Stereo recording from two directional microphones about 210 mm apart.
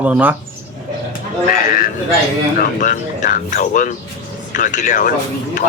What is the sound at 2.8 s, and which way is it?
Speech, 35° left (ahead or behind).